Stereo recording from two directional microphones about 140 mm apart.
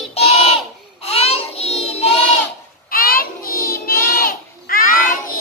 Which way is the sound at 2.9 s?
90° left.